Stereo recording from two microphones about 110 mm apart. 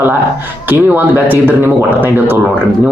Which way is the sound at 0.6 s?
15° right (ahead or behind).